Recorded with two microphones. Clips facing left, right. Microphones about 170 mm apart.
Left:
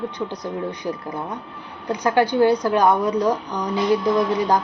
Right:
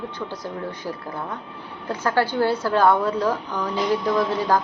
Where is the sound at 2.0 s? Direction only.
15° left (ahead or behind).